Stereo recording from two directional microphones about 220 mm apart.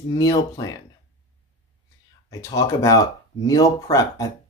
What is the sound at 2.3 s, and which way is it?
Speech, 15° left (ahead or behind).